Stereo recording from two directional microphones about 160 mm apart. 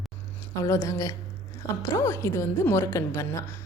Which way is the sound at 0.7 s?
20° left (ahead or behind).